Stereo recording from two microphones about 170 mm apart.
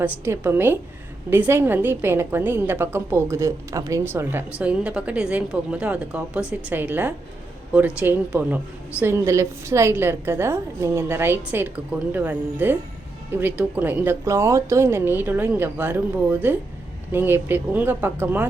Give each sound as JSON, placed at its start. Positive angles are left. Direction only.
{"t": 0.0, "sound": "a woman's voice", "side_deg": -10}